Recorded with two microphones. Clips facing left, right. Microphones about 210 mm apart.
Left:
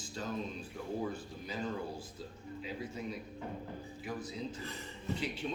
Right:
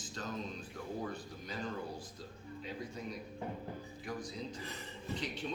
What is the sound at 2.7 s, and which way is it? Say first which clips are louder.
Speech: left 2 dB; 5° left (ahead or behind).